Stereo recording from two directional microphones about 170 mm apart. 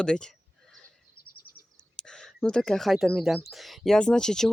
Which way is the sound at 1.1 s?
60° left (ahead or behind).